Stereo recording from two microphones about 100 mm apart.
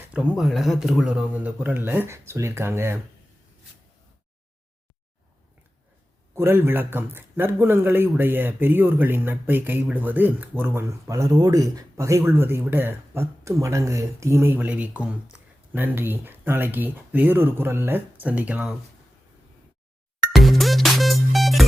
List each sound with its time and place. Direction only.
0.3 s speech: centre (ahead or behind); by 3.0 s 25° right (ahead or behind)
6.3 s speech: 20° right (ahead or behind)
11.1 s speech: 35° right (ahead or behind); by 18.6 s 15° right (ahead or behind)
20.3 s music: centre (ahead or behind)